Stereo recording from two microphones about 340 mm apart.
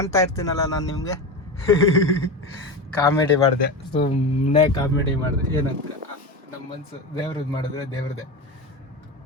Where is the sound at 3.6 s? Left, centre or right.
Left.